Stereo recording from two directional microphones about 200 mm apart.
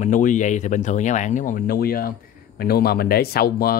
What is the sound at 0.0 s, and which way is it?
Speech, 40° left (ahead or behind).